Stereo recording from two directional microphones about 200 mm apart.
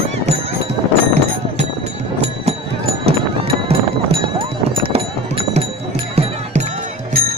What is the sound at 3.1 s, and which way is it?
Music, 30° right (ahead or behind).